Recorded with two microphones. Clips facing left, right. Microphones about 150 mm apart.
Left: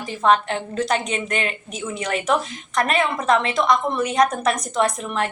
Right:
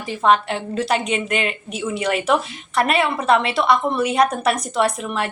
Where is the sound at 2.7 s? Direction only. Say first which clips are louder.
Right 2 dB; 10° right (ahead or behind).